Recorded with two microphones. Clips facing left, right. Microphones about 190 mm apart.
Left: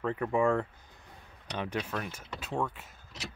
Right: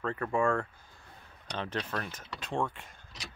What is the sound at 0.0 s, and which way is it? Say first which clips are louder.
Speech: left 2 dB; 15° left (ahead or behind).